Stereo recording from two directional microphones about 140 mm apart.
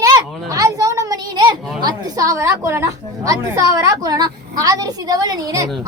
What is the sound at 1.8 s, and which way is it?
A woman's voice, 30° right (ahead or behind).